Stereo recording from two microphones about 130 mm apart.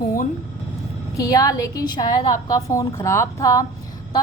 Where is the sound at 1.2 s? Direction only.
25° left (ahead or behind).